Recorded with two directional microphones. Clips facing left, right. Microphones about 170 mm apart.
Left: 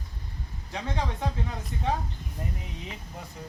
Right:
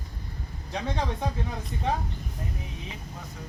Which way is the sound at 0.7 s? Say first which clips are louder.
Right 2 dB; 15° right (ahead or behind).